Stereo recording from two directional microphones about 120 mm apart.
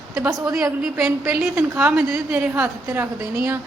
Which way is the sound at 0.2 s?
30° right (ahead or behind).